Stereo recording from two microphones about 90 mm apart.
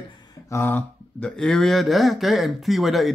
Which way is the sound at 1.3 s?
5° left (ahead or behind).